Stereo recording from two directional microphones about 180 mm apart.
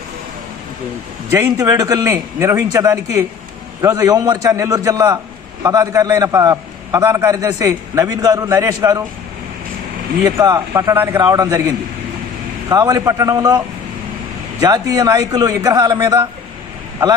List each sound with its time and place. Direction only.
1.3 s a man's voice: 15° right (ahead or behind)
10.2 s a man's voice: 20° right (ahead or behind)
12.6 s a man's voice: 20° right (ahead or behind)
14.6 s a man's voice: 20° right (ahead or behind)